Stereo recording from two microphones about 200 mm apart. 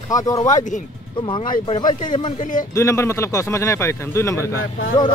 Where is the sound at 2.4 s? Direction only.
40° left (ahead or behind).